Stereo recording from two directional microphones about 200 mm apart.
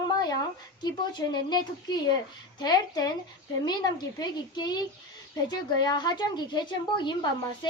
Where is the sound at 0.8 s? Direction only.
20° left (ahead or behind).